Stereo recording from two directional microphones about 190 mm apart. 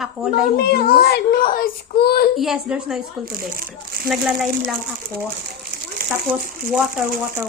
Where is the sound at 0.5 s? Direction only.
50° left (ahead or behind).